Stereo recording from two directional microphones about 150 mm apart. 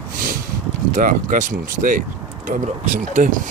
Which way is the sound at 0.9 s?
65° right (ahead or behind).